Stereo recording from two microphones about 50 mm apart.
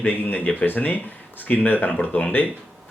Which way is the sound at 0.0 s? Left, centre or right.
Left.